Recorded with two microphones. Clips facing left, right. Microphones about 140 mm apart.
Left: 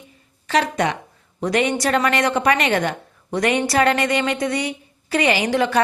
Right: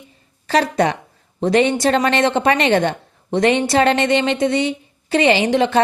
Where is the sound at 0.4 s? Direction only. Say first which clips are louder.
Right 3 dB; 35° right (ahead or behind).